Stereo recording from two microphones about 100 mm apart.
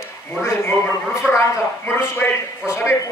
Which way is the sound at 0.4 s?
25° left (ahead or behind).